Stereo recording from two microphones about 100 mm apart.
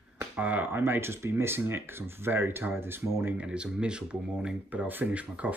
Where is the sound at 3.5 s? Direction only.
10° right (ahead or behind).